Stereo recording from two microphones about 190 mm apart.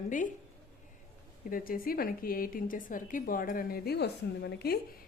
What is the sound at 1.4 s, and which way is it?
A woman's voice, 50° left (ahead or behind).